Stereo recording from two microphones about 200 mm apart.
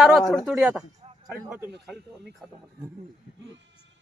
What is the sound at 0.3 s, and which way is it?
A man's voice, centre (ahead or behind).